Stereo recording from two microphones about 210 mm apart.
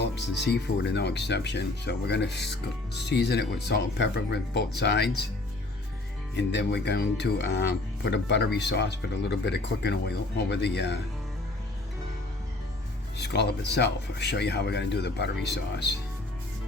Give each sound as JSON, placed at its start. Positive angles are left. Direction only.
{"t": 0.0, "sound": "speech", "side_deg": 55}
{"t": 6.3, "sound": "speech", "side_deg": 55}
{"t": 13.1, "sound": "speech", "side_deg": 55}